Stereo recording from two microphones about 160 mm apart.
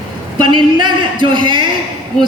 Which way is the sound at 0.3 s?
30° right (ahead or behind).